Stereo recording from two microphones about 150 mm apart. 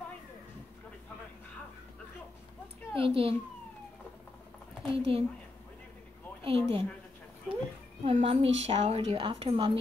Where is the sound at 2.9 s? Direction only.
35° right (ahead or behind).